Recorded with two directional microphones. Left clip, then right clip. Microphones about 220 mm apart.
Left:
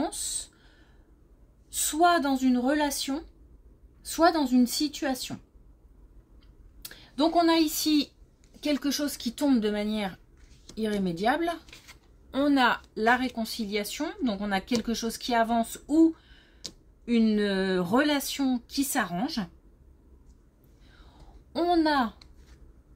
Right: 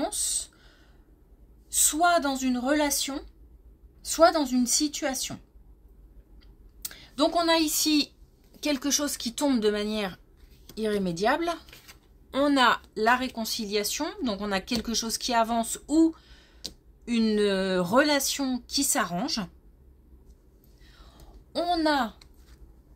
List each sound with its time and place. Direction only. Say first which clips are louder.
0.0 s a sound: right 2 dB; 30° right (ahead or behind)
1.8 s speech: even; 30° right (ahead or behind)
6.8 s speech: right 1 dB; 30° right (ahead or behind)
11.7 s a sound: left 1 dB; 5° left (ahead or behind)
12.3 s speech: right 2 dB; 35° right (ahead or behind)
21.5 s speech: left 1 dB; 30° right (ahead or behind)